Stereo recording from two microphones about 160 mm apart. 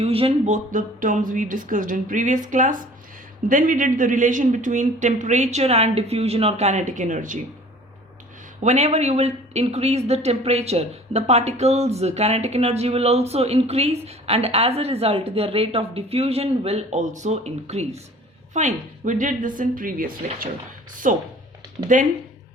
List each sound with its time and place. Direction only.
0.0 s a man's voice: 35° right (ahead or behind); by 7.3 s 55° right (ahead or behind)
8.6 s a woman's voice: 45° right (ahead or behind)